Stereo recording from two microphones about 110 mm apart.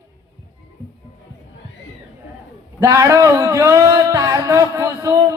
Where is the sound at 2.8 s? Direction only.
30° right (ahead or behind).